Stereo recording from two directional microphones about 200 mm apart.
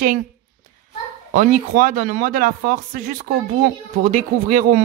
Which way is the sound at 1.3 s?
40° right (ahead or behind).